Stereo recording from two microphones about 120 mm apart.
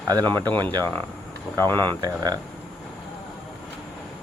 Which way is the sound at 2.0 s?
35° right (ahead or behind).